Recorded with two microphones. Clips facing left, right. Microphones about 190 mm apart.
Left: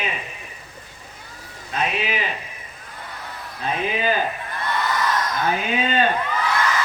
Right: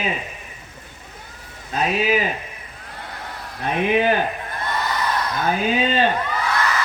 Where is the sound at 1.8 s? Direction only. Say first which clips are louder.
Right 5 dB; 40° right (ahead or behind).